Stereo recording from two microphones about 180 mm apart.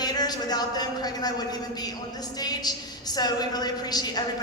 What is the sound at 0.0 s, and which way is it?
A woman's voice, 20° left (ahead or behind).